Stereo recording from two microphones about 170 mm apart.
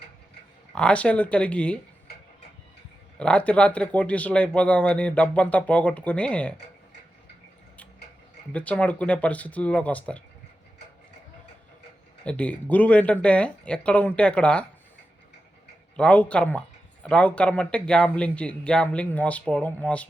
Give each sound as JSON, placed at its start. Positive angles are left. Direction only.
{"t": 0.7, "sound": "speech", "side_deg": 5}
{"t": 3.2, "sound": "speech", "side_deg": 5}
{"t": 8.5, "sound": "speech", "side_deg": 10}
{"t": 12.2, "sound": "speech", "side_deg": 5}
{"t": 16.0, "sound": "speech", "side_deg": 5}